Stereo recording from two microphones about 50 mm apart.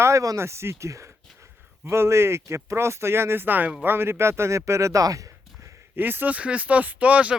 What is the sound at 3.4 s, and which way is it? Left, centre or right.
Speech, right.